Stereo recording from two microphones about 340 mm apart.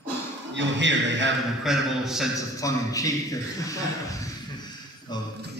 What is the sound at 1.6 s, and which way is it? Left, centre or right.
Speech, centre.